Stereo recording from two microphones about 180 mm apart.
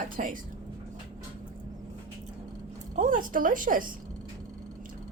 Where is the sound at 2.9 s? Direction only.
45° right (ahead or behind).